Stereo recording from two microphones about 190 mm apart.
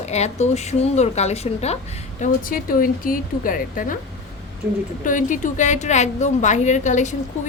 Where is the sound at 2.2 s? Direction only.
45° left (ahead or behind).